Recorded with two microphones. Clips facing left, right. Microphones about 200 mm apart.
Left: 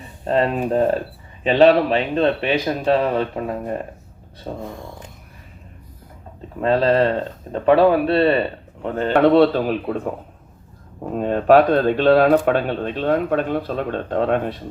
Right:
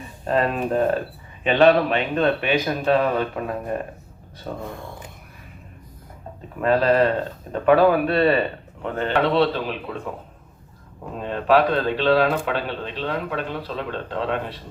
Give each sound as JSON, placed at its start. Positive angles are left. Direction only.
{"t": 0.3, "sound": "a man's voice", "side_deg": 25}
{"t": 6.6, "sound": "a man's voice", "side_deg": 30}
{"t": 11.2, "sound": "speech", "side_deg": 45}